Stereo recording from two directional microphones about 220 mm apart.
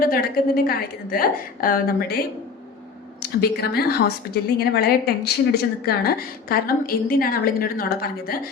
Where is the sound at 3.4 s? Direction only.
45° left (ahead or behind).